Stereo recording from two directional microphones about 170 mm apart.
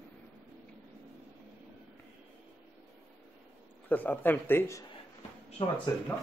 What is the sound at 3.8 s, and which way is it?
Speech, 10° left (ahead or behind).